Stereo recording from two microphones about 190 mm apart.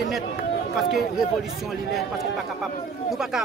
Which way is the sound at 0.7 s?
Centre (ahead or behind).